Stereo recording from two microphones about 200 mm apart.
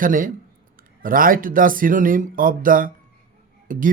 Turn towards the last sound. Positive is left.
turn(degrees=-40)  # may be behind; listen again after turning